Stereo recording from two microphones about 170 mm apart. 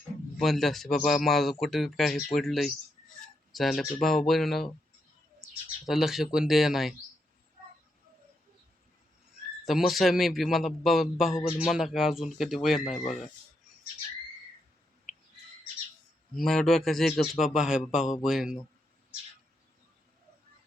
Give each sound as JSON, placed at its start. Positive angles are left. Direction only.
{"t": 0.3, "sound": "speech", "side_deg": 0}
{"t": 5.9, "sound": "speech", "side_deg": 0}
{"t": 9.6, "sound": "speech", "side_deg": 0}
{"t": 12.8, "sound": "speech", "side_deg": 40}
{"t": 16.3, "sound": "speech", "side_deg": 0}